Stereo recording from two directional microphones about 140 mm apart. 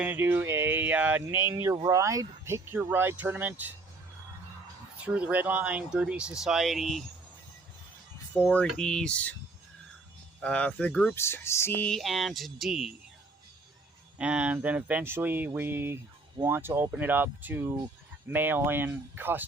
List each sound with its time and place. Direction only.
0.0 s speech: 15° right (ahead or behind)
5.0 s speech: 10° right (ahead or behind)
8.4 s speech: 10° left (ahead or behind)
8.6 s music: 5° left (ahead or behind)
10.4 s speech: 10° left (ahead or behind)
11.2 s music: 15° left (ahead or behind); by 12.9 s centre (ahead or behind)
14.2 s speech: 10° right (ahead or behind)